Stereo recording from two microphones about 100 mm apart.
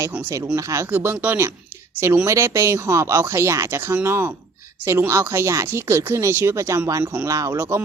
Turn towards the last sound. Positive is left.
turn(degrees=-25)  # may be behind; listen again after turning